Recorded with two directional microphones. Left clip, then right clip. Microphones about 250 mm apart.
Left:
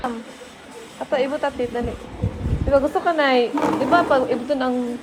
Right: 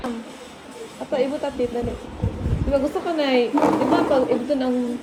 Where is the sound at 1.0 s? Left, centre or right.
Left.